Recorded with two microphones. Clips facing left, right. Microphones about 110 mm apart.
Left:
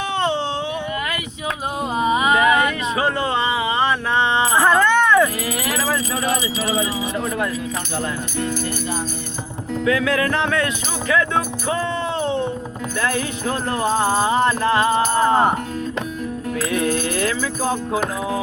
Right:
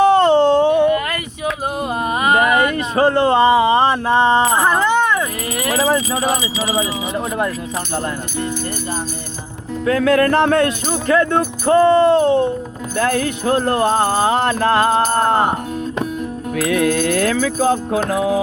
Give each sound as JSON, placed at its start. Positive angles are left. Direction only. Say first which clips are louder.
{"t": 0.0, "sound": "a sound", "louder": "right 11 dB", "side_deg": -45}
{"t": 4.1, "sound": "music", "louder": "right 7 dB", "side_deg": -45}
{"t": 4.5, "sound": "music", "louder": "even", "side_deg": -15}
{"t": 9.8, "sound": "music", "louder": "right 5 dB", "side_deg": -45}
{"t": 11.1, "sound": "speech", "louder": "right 4 dB", "side_deg": -45}
{"t": 13.0, "sound": "music", "louder": "right 5 dB", "side_deg": -55}
{"t": 16.6, "sound": "music", "louder": "right 5 dB", "side_deg": -60}